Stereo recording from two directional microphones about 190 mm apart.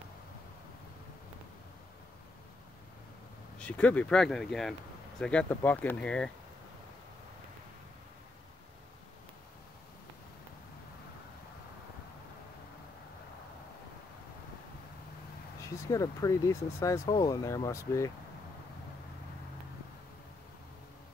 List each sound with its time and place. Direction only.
3.5 s speech: 5° left (ahead or behind)
15.6 s speech: 15° left (ahead or behind)